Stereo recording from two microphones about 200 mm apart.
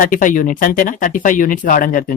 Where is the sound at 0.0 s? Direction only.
40° left (ahead or behind).